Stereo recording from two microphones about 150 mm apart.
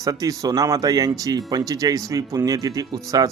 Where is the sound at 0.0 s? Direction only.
25° right (ahead or behind).